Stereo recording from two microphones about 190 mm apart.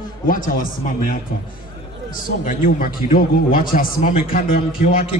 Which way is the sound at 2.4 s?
50° left (ahead or behind).